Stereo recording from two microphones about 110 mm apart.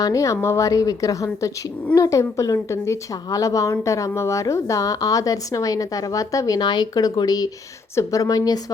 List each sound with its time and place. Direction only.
0.0 s a woman's voice: 30° left (ahead or behind)